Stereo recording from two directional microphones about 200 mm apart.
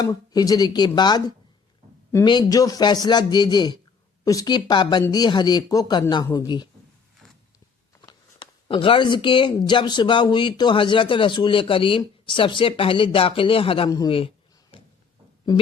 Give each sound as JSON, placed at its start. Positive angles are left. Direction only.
{"t": 0.0, "sound": "speech", "side_deg": 20}
{"t": 8.0, "sound": "speech", "side_deg": 25}